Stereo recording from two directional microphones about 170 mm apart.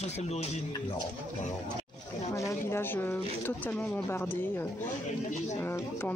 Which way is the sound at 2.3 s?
15° left (ahead or behind).